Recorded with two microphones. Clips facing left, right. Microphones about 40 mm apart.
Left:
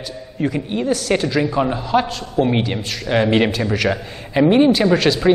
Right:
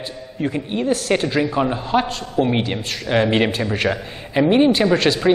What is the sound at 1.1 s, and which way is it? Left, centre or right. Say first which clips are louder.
Speech: left 1 dB; right.